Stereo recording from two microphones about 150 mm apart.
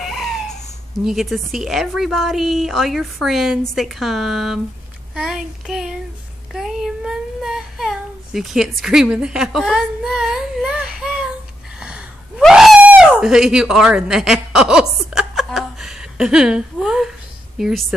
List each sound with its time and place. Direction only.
0.0 s a sound: centre (ahead or behind)
1.0 s a woman's voice: centre (ahead or behind)
11.8 s gasp: 5° right (ahead or behind)
17.6 s a woman's voice: centre (ahead or behind)